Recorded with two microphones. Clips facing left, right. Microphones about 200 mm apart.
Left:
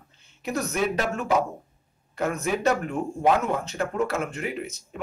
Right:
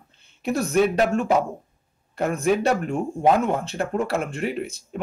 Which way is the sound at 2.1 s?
30° right (ahead or behind).